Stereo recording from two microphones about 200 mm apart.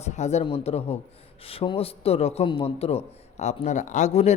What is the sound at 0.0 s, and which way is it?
A man's voice, 35° left (ahead or behind).